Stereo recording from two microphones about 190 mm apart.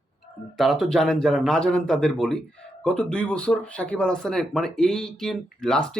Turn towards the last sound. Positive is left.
turn(degrees=5)  # may be behind; listen again after turning